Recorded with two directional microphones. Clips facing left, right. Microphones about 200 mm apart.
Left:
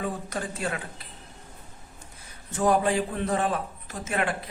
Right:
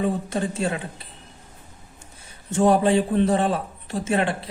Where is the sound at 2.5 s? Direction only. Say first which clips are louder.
Right 5 dB; 30° right (ahead or behind).